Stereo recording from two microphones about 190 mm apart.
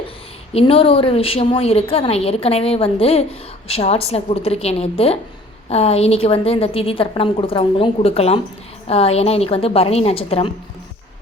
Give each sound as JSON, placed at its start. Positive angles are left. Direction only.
{"t": 0.5, "sound": "a woman's voice", "side_deg": 30}